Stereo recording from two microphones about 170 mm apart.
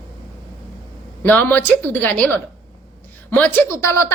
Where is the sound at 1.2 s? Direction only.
10° left (ahead or behind).